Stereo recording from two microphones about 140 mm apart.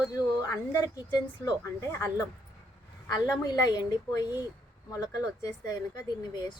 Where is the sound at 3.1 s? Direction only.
25° left (ahead or behind).